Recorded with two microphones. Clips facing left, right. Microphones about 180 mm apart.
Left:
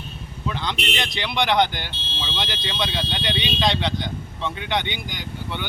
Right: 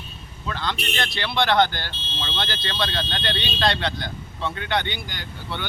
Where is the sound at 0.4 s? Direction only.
15° left (ahead or behind).